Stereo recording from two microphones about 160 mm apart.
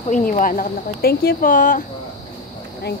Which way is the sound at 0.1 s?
55° left (ahead or behind).